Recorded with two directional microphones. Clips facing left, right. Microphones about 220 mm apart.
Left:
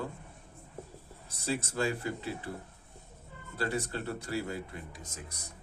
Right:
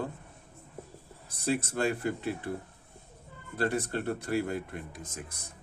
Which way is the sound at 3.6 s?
55° right (ahead or behind).